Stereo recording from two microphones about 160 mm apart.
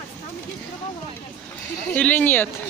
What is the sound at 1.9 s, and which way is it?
Speech, 10° left (ahead or behind).